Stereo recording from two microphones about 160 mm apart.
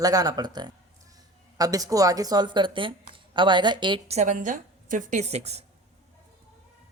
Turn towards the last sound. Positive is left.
turn(degrees=-40)  # may be behind; listen again after turning